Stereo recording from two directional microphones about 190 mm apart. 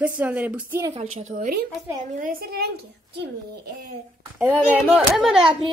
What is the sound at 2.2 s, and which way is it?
A woman's voice, 50° right (ahead or behind).